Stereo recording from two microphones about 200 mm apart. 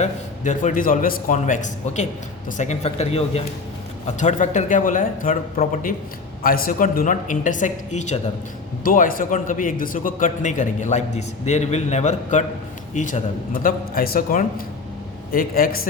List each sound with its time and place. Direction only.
0.0 s a man's voice: 40° left (ahead or behind)